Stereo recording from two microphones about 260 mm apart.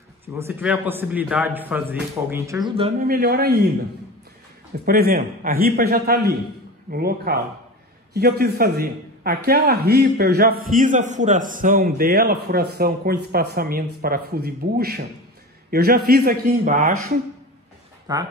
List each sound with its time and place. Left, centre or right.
0.2 s a man's voice: centre
3.1 s a man's voice: right
4.7 s a man's voice: right
18.1 s a man's voice: centre